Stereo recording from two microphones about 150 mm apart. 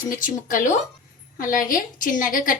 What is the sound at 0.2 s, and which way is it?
A woman's voice, 60° left (ahead or behind).